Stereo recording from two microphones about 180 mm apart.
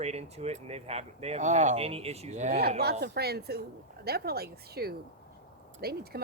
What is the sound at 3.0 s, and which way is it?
Speech, 65° right (ahead or behind).